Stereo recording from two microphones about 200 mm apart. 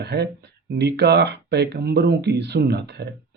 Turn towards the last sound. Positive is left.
turn(degrees=-55)  # may be behind; listen again after turning